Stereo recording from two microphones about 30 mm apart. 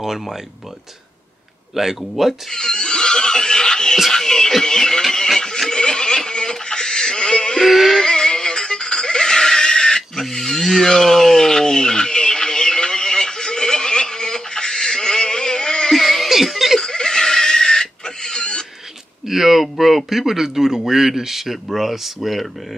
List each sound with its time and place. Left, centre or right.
1.8 s speech: centre
2.5 s neigh: left
4.1 s music: centre
4.6 s speech: left
5.7 s a sound: left
7.6 s speech: centre
8.0 s music: left
10.3 s a sound: centre
15.9 s music: centre
16.5 s a sound: centre
16.8 s pig: left
19.2 s a sound: centre
19.6 s speech: centre